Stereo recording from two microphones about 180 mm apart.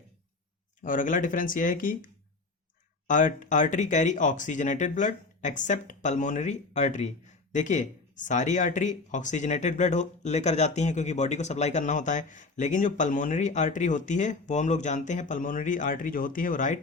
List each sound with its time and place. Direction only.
0.8 s speech: 45° left (ahead or behind)
3.1 s speech: 45° left (ahead or behind)